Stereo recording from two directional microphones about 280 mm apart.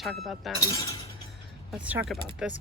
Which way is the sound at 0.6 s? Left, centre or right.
Centre.